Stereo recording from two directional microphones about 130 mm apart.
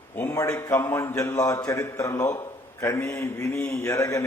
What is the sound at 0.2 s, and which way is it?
A man's voice, 20° left (ahead or behind).